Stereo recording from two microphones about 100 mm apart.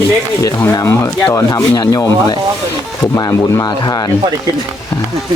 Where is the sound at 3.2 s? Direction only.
35° left (ahead or behind).